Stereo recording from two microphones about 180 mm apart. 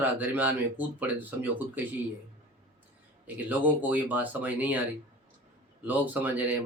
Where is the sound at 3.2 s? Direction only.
10° right (ahead or behind).